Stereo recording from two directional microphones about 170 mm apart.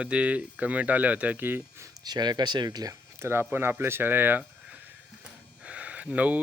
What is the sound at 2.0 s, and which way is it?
Speech, 25° right (ahead or behind).